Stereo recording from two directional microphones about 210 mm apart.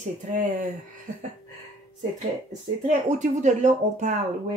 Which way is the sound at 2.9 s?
35° right (ahead or behind).